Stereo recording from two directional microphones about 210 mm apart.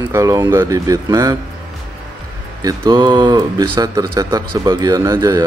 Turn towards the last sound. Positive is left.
turn(degrees=-15)  # may be behind; listen again after turning